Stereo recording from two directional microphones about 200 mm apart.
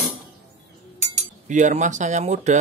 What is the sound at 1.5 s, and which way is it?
Speech, 35° right (ahead or behind).